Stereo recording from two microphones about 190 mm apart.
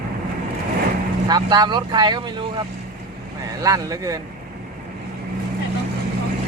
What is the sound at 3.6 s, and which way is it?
Speech, 20° right (ahead or behind).